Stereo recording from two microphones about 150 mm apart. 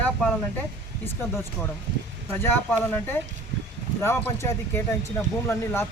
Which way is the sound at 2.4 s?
15° left (ahead or behind).